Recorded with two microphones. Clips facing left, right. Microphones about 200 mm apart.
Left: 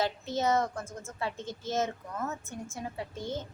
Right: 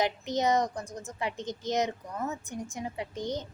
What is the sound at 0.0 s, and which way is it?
A woman's voice, 15° right (ahead or behind).